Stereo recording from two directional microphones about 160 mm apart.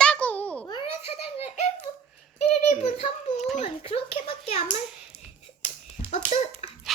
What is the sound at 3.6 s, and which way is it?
A child's voice, 40° left (ahead or behind).